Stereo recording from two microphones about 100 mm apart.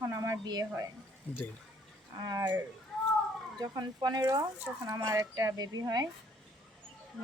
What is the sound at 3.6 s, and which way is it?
Speech, 45° right (ahead or behind).